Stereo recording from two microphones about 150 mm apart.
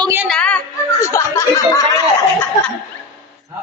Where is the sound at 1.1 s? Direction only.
20° left (ahead or behind).